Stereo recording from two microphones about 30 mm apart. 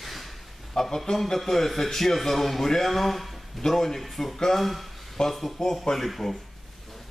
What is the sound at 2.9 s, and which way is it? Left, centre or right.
A man's voice, centre.